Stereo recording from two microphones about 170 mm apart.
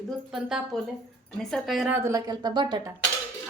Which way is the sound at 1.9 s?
15° right (ahead or behind).